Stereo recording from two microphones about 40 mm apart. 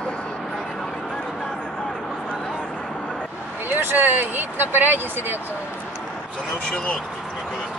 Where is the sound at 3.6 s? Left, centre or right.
Right.